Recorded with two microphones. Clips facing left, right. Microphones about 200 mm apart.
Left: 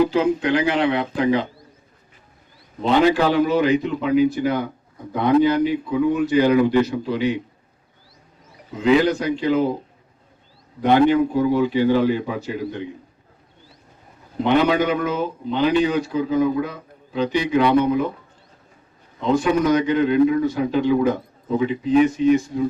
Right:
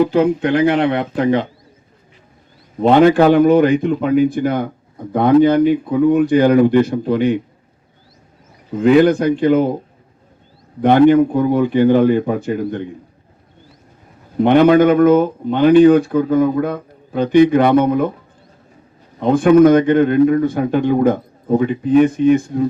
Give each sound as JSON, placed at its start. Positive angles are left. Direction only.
{"t": 0.0, "sound": "speech", "side_deg": -55}
{"t": 2.8, "sound": "speech", "side_deg": -55}
{"t": 8.8, "sound": "speech", "side_deg": -50}
{"t": 10.8, "sound": "speech", "side_deg": -50}
{"t": 14.3, "sound": "speech", "side_deg": -50}
{"t": 19.2, "sound": "speech", "side_deg": -55}